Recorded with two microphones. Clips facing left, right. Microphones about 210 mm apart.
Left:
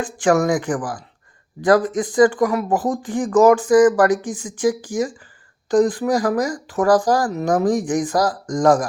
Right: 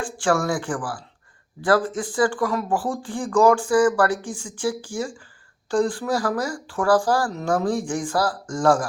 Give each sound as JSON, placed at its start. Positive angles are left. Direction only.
{"t": 0.3, "sound": "speech", "side_deg": 20}